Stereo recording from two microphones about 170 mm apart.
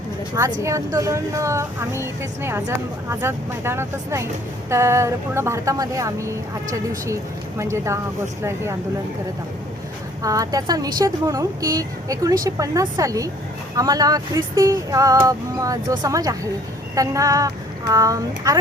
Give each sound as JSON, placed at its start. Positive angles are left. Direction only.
{"t": 0.3, "sound": "speech", "side_deg": -15}
{"t": 7.6, "sound": "speech", "side_deg": -15}
{"t": 10.2, "sound": "a woman's voice", "side_deg": -20}